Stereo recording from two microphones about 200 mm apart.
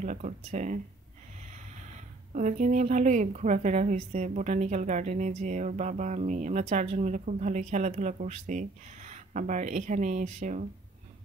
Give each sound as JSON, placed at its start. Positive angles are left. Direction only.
{"t": 0.0, "sound": "a woman's voice", "side_deg": -35}
{"t": 2.3, "sound": "a woman's voice", "side_deg": -40}